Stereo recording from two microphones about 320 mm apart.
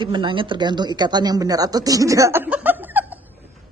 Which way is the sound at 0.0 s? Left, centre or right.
Centre.